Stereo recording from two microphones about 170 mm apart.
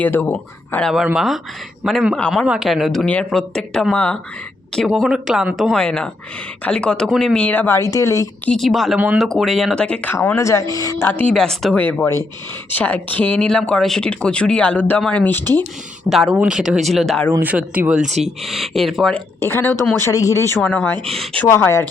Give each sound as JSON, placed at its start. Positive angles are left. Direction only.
{"t": 0.0, "sound": "speech", "side_deg": 10}
{"t": 8.4, "sound": "speech", "side_deg": 0}
{"t": 16.0, "sound": "speech", "side_deg": 0}
{"t": 17.4, "sound": "speech", "side_deg": -10}
{"t": 19.5, "sound": "speech", "side_deg": 15}